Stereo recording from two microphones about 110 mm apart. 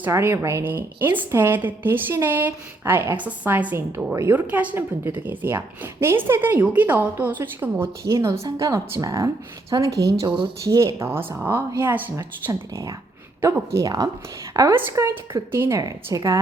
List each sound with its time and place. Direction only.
0.0 s a woman's voice: 25° right (ahead or behind)
4.4 s a woman's voice: 15° right (ahead or behind)
12.1 s a woman's voice: 30° right (ahead or behind)
14.7 s a woman's voice: 25° right (ahead or behind)